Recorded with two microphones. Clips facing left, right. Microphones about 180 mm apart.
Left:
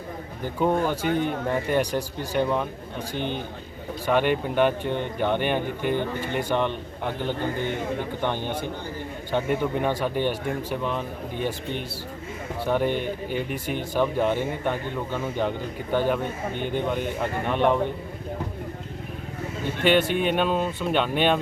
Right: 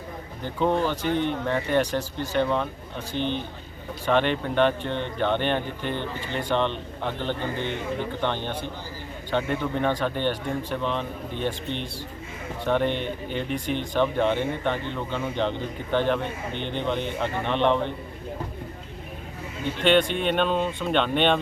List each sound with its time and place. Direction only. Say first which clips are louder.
0.6 s speech: even; 10° left (ahead or behind)
1.0 s speech: even; 45° left (ahead or behind)
1.5 s speech: right 1 dB; 10° left (ahead or behind)
3.2 s speech: right 2 dB; 50° left (ahead or behind)
4.0 s speech: left 1 dB; 10° left (ahead or behind)
19.8 s speech: even; 5° left (ahead or behind)